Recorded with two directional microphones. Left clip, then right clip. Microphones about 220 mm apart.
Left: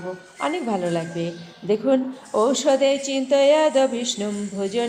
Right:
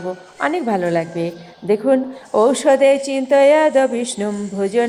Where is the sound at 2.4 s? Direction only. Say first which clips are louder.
Right 6 dB; 25° right (ahead or behind).